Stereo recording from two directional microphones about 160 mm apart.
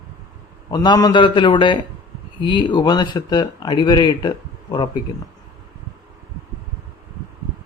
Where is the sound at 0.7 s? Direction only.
25° left (ahead or behind).